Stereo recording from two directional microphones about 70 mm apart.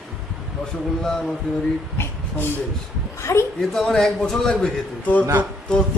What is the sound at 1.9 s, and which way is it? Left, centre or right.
Speech, left.